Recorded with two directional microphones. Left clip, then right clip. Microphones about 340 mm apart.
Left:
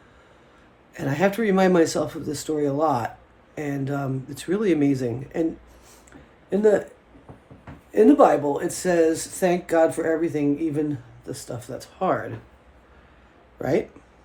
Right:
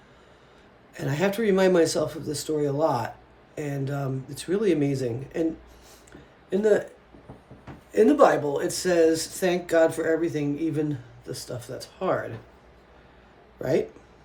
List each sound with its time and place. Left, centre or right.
0.9 s speech: left
6.5 s speech: centre
7.9 s speech: centre
13.6 s speech: left